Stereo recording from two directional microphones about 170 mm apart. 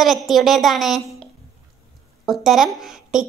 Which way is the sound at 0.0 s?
Centre (ahead or behind).